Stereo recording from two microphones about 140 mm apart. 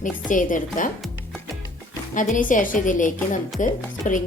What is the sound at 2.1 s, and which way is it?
A woman's voice, 70° left (ahead or behind).